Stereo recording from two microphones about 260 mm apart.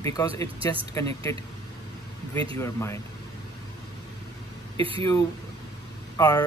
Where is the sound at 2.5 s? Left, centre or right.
Centre.